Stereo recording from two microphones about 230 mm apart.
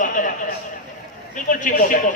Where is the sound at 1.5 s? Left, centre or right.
Left.